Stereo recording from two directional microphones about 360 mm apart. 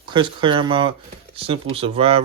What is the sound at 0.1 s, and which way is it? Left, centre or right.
Speech, centre.